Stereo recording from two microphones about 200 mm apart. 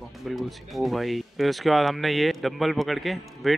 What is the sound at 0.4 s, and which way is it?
Speech, centre (ahead or behind).